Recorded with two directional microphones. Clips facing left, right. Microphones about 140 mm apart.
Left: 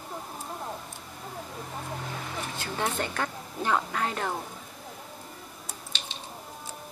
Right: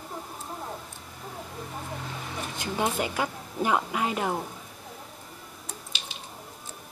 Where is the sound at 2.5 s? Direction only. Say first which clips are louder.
Right 3 dB; 15° right (ahead or behind).